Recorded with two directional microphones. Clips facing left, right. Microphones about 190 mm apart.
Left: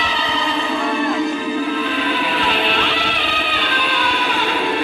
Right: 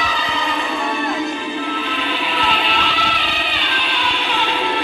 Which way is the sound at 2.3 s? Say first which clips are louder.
Left 2 dB; 50° left (ahead or behind).